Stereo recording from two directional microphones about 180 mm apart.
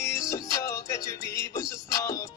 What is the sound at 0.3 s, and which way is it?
Music, 20° left (ahead or behind).